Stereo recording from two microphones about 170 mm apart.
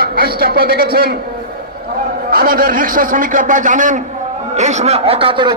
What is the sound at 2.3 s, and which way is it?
A man's voice, 60° right (ahead or behind).